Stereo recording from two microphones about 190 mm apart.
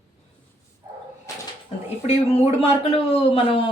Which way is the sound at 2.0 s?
35° left (ahead or behind).